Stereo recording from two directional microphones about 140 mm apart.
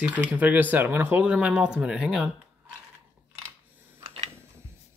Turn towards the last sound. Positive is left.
turn(degrees=-15)  # may be behind; listen again after turning